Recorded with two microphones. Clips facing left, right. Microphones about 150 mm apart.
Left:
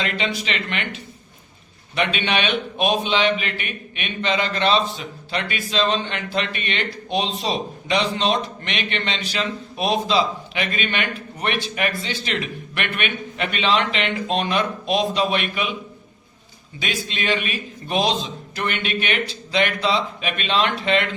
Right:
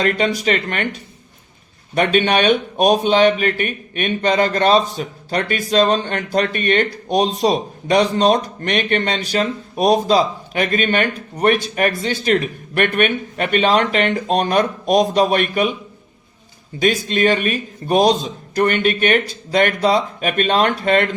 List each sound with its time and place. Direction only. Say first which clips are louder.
0.0 s a man's voice: right 8 dB; 45° right (ahead or behind)
16.8 s a man's voice: right 10 dB; 45° right (ahead or behind)